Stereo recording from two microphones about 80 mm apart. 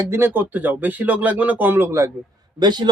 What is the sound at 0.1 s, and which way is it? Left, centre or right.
Speech, right.